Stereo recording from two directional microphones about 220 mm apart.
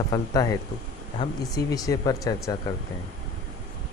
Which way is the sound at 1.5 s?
15° left (ahead or behind).